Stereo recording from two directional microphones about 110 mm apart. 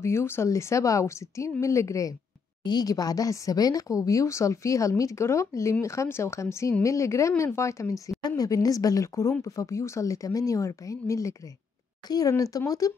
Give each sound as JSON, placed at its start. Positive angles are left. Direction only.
{"t": 0.0, "sound": "speech", "side_deg": 25}